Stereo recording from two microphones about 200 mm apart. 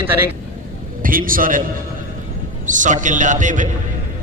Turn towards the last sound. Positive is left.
turn(degrees=-40)  # may be behind; listen again after turning